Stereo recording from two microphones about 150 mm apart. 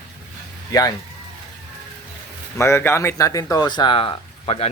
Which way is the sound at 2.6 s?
15° left (ahead or behind).